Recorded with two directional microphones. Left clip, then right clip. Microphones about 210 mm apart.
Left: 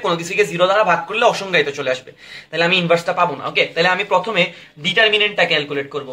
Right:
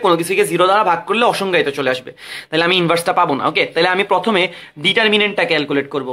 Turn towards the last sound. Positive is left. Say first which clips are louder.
# right 1 dB
turn(degrees=-50)  # may be behind; listen again after turning